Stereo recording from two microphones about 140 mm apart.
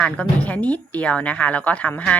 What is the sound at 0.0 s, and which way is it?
A woman's voice, 10° left (ahead or behind).